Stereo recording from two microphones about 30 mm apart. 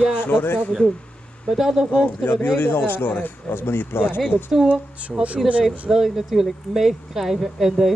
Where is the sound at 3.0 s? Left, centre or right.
Left.